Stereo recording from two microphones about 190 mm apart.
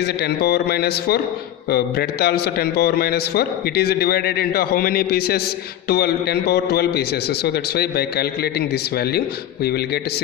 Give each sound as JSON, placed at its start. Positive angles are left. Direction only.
{"t": 0.0, "sound": "a man's voice", "side_deg": 60}